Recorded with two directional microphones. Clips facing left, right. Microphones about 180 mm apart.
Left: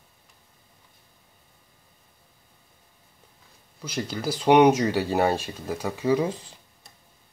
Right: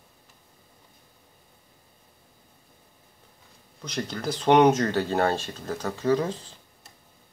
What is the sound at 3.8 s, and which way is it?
Speech, 5° left (ahead or behind).